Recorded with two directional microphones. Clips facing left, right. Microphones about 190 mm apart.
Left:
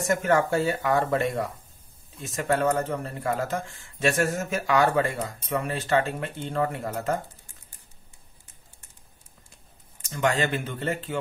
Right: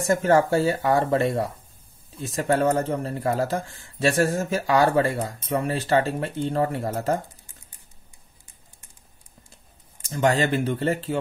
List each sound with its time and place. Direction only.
0.1 s speech: 30° right (ahead or behind)
10.0 s speech: 35° right (ahead or behind)